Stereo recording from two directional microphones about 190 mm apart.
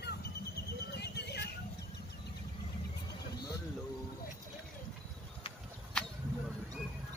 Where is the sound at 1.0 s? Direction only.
60° left (ahead or behind).